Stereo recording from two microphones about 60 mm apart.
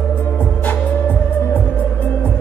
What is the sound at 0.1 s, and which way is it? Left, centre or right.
Music, left.